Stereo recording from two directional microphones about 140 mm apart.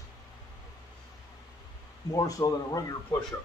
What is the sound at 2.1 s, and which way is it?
Speech, 25° left (ahead or behind).